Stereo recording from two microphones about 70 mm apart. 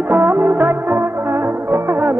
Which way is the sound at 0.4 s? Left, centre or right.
Right.